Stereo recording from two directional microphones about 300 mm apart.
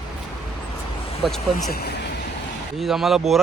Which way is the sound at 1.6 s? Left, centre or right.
Left.